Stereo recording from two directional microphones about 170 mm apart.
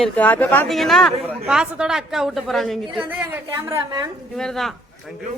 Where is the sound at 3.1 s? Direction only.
10° right (ahead or behind).